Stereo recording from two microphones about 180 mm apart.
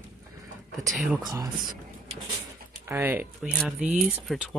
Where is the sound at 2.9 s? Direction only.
10° right (ahead or behind).